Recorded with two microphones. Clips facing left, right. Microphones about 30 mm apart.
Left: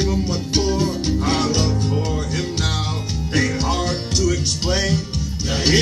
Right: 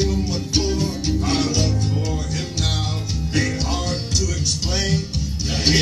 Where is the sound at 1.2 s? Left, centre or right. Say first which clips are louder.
Left 1 dB; left.